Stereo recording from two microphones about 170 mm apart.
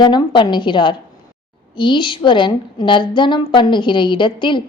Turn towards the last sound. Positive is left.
turn(degrees=30)  # may be behind; listen again after turning